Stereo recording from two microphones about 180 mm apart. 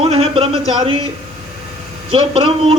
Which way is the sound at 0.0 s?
30° right (ahead or behind).